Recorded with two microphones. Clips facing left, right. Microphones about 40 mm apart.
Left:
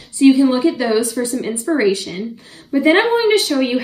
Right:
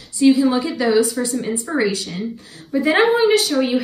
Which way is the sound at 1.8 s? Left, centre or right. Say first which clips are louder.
Left 4 dB; left.